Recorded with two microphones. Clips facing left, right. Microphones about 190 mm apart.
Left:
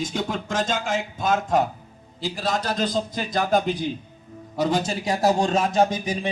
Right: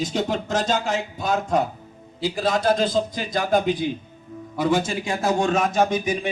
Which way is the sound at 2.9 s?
45° left (ahead or behind).